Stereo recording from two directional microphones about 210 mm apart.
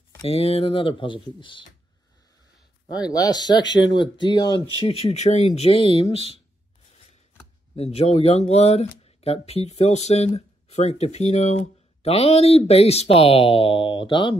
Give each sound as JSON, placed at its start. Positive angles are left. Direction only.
{"t": 0.2, "sound": "speech", "side_deg": 30}
{"t": 2.9, "sound": "speech", "side_deg": 20}
{"t": 7.7, "sound": "speech", "side_deg": 30}